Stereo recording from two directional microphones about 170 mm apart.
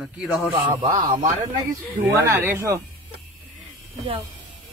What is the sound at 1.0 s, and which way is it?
Speech, 50° right (ahead or behind).